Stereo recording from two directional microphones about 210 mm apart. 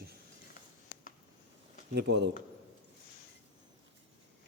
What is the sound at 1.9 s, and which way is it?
Speech, 50° right (ahead or behind).